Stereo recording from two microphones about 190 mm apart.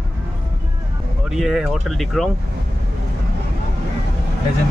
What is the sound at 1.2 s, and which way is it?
Speech, centre (ahead or behind).